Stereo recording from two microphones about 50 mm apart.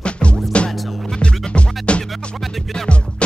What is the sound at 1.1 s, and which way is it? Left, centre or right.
Music, left.